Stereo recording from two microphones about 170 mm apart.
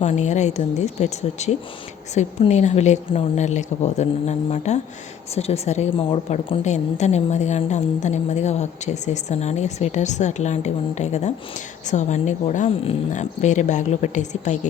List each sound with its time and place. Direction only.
0.0 s a woman's voice: 40° left (ahead or behind)